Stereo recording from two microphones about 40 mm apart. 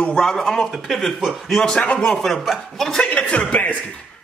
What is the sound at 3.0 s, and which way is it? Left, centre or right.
Speech, left.